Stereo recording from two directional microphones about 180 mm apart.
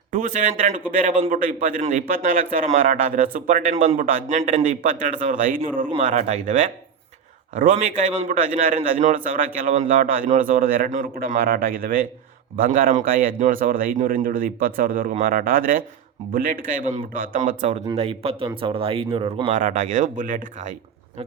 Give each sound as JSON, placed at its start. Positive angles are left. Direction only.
{"t": 0.1, "sound": "a man's voice", "side_deg": -45}